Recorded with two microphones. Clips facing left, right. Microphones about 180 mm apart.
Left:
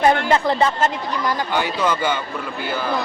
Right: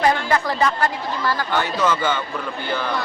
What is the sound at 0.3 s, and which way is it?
Speech, 25° left (ahead or behind).